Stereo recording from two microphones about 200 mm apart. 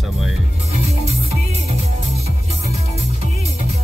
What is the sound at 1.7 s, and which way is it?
Music, 30° right (ahead or behind).